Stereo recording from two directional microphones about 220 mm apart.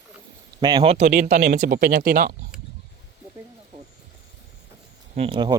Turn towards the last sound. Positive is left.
turn(degrees=-20)  # may be behind; listen again after turning